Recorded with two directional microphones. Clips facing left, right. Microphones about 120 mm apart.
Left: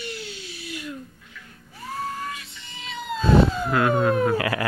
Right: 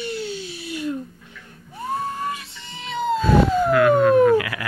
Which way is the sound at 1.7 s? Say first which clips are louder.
Right 5 dB; 25° right (ahead or behind).